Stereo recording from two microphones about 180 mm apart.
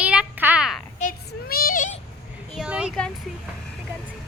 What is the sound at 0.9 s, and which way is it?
Child singing, 50° left (ahead or behind).